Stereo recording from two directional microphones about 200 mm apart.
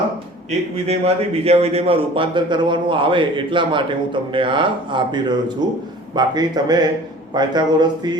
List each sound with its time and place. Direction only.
0.9 s speech: 30° right (ahead or behind)